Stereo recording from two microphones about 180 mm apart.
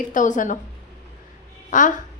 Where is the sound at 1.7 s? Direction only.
45° left (ahead or behind).